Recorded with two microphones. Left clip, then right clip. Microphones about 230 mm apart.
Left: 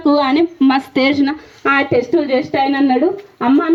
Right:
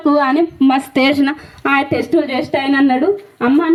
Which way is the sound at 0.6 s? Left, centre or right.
Right.